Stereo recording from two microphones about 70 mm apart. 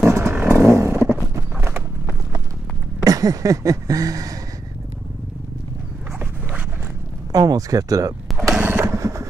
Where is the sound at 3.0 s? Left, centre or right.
Right.